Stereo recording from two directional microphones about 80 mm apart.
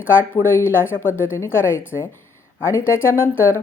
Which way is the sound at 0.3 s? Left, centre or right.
Left.